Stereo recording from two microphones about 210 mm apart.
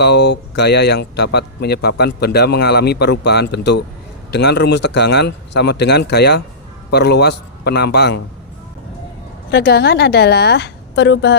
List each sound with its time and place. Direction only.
0.0 s speech: 50° left (ahead or behind)
9.5 s speech: 50° left (ahead or behind)